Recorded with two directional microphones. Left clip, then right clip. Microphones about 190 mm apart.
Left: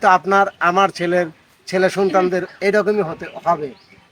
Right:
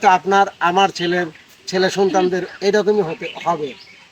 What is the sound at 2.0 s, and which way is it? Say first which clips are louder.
Speech: even; 15° left (ahead or behind).